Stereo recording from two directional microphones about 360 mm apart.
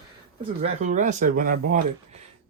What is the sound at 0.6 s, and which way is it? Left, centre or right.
Speech, centre.